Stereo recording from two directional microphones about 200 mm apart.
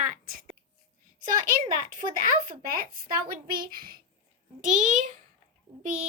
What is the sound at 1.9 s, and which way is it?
Speech, 45° right (ahead or behind).